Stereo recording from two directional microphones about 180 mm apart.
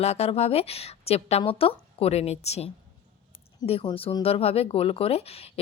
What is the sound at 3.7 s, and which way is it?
Speech, 30° left (ahead or behind).